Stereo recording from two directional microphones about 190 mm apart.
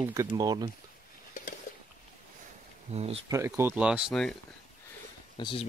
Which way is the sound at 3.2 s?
15° right (ahead or behind).